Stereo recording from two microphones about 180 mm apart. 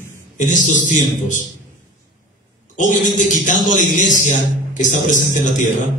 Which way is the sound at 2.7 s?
45° left (ahead or behind).